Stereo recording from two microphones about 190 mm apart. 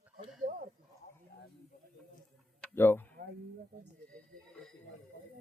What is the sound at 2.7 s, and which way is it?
Speech, 10° left (ahead or behind).